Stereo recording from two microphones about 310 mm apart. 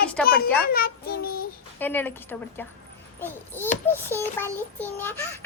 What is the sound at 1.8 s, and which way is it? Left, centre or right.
Speech, centre.